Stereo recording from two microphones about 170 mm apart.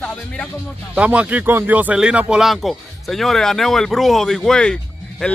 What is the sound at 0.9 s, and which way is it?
Speech, 10° right (ahead or behind).